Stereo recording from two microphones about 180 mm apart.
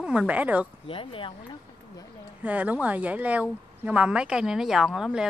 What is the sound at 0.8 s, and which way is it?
Speech, 30° left (ahead or behind).